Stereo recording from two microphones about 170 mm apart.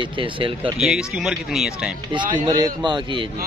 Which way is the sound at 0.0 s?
30° right (ahead or behind).